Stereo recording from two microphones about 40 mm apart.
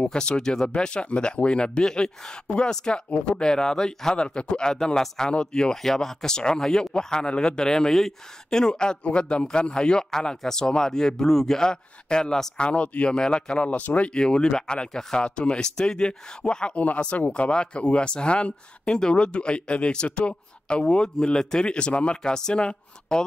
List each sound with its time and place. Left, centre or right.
0.0 s speech: left
12.5 s speech: left
14.1 s speech: left